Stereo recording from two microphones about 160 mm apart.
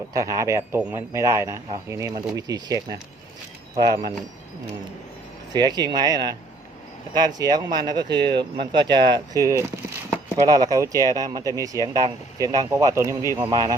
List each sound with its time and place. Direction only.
0.1 s speech: 20° right (ahead or behind)
5.5 s speech: 25° right (ahead or behind)